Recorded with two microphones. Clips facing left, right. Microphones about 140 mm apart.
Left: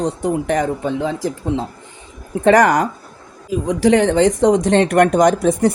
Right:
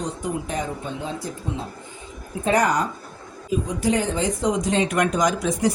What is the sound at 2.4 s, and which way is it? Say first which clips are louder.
Speech: left 8 dB; 80° left.